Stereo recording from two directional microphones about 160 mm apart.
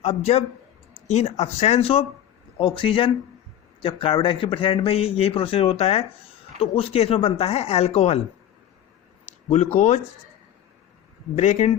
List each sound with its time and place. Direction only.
0.0 s a man's voice: 40° left (ahead or behind)
9.7 s speech: 45° left (ahead or behind)
11.3 s speech: 45° left (ahead or behind)